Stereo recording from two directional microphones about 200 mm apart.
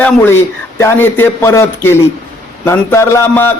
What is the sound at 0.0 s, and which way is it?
A man's voice, 10° left (ahead or behind).